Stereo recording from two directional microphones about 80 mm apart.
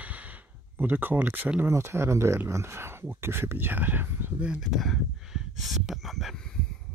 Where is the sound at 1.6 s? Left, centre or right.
Right.